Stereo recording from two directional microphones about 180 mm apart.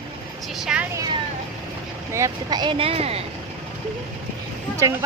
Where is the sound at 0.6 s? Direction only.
5° right (ahead or behind).